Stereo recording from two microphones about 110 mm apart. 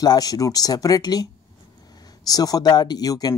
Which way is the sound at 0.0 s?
35° left (ahead or behind).